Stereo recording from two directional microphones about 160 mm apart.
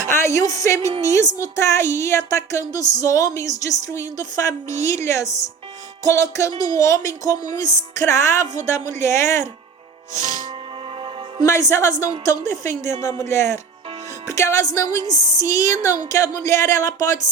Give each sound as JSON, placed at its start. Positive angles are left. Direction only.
{"t": 0.1, "sound": "a woman's voice", "side_deg": 20}
{"t": 10.2, "sound": "music", "side_deg": -50}
{"t": 11.4, "sound": "a woman's voice", "side_deg": 20}